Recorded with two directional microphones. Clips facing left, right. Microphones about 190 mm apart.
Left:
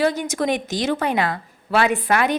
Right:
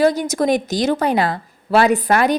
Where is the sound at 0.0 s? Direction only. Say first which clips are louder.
Right 4 dB; 40° right (ahead or behind).